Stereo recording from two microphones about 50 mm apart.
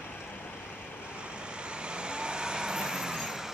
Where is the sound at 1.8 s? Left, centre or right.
Centre.